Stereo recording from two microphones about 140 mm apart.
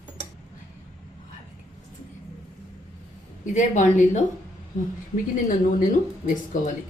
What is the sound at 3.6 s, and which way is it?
Speech, 60° left (ahead or behind).